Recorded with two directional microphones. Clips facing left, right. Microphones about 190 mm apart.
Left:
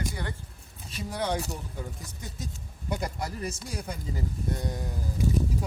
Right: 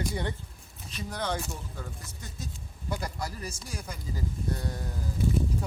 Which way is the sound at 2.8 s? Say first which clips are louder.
Left 2 dB; 20° left (ahead or behind).